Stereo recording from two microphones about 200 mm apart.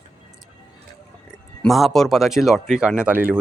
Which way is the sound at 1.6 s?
Centre (ahead or behind).